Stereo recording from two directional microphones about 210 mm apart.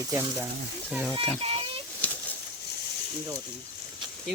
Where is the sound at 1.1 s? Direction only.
25° right (ahead or behind).